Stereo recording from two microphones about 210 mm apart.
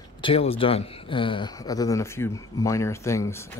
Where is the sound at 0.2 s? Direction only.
25° left (ahead or behind).